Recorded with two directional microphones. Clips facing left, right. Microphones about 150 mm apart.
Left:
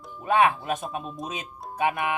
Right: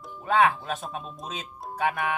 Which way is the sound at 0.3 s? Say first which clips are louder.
Left 1 dB; 20° left (ahead or behind).